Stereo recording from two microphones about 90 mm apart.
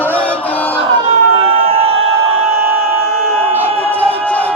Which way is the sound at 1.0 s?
90° right.